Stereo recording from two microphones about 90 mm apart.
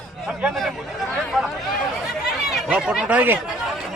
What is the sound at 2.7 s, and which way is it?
Speech, 5° right (ahead or behind).